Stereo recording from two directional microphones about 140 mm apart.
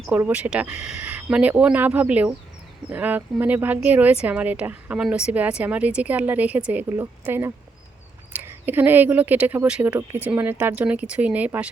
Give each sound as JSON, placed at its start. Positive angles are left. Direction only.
{"t": 0.2, "sound": "speech", "side_deg": -10}